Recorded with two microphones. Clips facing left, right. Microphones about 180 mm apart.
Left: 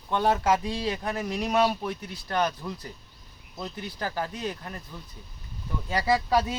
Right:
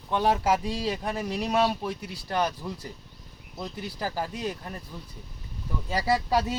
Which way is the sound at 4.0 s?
5° right (ahead or behind).